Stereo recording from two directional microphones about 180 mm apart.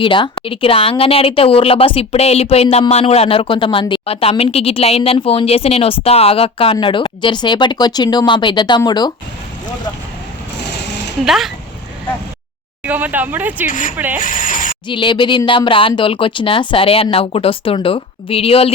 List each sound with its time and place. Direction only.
0.0 s speech: 30° left (ahead or behind)
10.6 s a sound: 70° left (ahead or behind)
11.3 s speech: centre (ahead or behind)
12.8 s speech: 10° right (ahead or behind)
13.7 s speech: 45° left (ahead or behind)
14.2 s a sound: 45° left (ahead or behind)
14.8 s speech: 25° left (ahead or behind)